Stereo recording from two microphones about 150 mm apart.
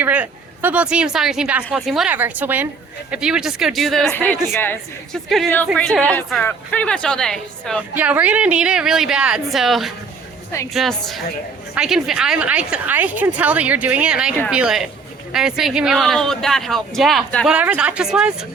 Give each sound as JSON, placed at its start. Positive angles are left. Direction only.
{"t": 0.0, "sound": "a woman's voice", "side_deg": -10}
{"t": 7.9, "sound": "a woman's voice", "side_deg": -10}